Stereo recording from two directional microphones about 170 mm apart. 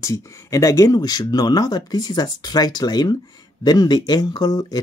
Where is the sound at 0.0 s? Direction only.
20° left (ahead or behind).